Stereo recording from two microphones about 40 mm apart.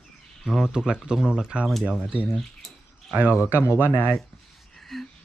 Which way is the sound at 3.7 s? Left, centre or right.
Right.